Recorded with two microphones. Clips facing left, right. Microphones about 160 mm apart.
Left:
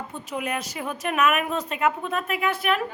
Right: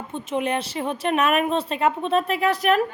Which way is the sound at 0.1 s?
25° right (ahead or behind).